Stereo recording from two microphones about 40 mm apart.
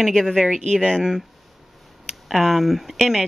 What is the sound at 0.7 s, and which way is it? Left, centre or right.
Speech, centre.